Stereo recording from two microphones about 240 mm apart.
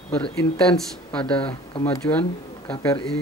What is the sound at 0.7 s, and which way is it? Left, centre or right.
Speech, centre.